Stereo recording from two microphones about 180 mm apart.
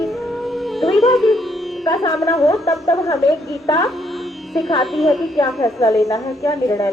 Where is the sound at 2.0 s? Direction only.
20° left (ahead or behind).